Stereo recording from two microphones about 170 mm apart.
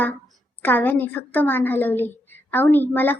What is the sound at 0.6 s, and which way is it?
A woman's voice, 10° left (ahead or behind).